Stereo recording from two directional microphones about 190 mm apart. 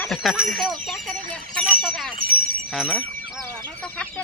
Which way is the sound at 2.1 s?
50° right (ahead or behind).